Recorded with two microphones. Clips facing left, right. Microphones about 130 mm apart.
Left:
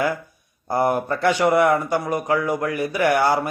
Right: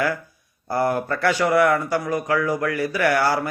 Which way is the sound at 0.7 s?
20° left (ahead or behind).